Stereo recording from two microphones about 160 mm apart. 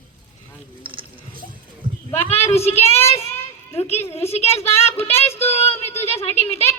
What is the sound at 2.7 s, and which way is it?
Speech, 15° left (ahead or behind).